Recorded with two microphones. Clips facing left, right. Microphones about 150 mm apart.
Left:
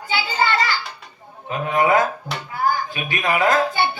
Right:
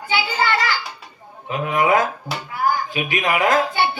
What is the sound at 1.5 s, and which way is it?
A man's voice, 20° right (ahead or behind).